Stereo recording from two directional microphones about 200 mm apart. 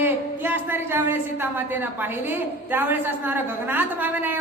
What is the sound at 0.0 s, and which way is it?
A woman's voice, 10° right (ahead or behind).